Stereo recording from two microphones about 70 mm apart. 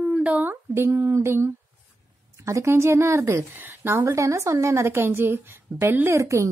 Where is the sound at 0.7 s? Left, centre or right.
Right.